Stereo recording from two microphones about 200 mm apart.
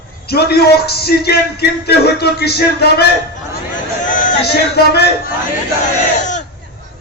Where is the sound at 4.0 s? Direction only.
40° left (ahead or behind).